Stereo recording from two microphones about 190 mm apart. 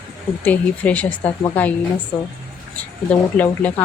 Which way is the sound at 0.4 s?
10° left (ahead or behind).